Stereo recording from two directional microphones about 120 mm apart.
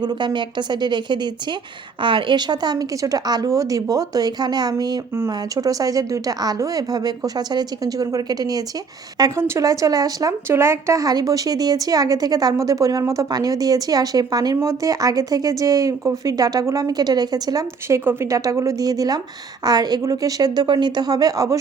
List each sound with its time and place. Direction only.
0.0 s speech: 40° right (ahead or behind)